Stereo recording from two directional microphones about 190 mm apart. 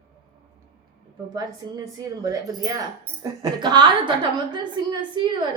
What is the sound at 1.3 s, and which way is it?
A woman's voice, 20° right (ahead or behind).